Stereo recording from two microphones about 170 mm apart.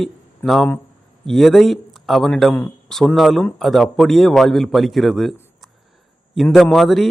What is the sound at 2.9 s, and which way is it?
A man's voice, centre (ahead or behind).